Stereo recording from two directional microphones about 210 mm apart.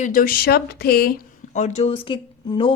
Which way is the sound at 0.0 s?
40° left (ahead or behind).